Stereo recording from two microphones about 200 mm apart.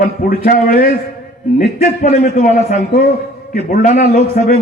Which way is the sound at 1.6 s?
30° left (ahead or behind).